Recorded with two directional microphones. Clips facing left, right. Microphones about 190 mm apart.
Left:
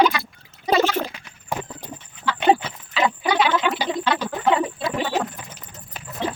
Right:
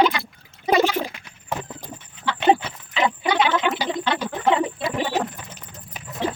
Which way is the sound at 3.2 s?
20° right (ahead or behind).